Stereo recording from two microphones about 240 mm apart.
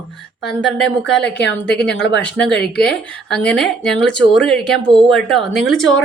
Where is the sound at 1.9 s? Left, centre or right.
Left.